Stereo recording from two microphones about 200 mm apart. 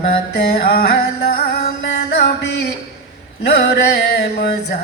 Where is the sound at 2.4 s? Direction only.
60° left (ahead or behind).